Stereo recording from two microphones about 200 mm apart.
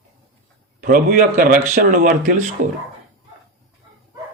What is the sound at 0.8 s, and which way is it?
A man's voice, 45° right (ahead or behind).